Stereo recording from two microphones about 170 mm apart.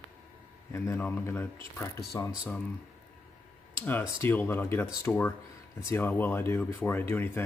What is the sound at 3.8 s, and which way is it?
Speech, 15° left (ahead or behind).